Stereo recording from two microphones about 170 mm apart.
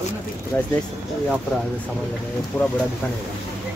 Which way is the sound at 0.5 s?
10° left (ahead or behind).